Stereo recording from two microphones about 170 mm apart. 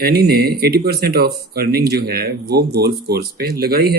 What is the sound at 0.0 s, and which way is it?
Speech, 70° right (ahead or behind).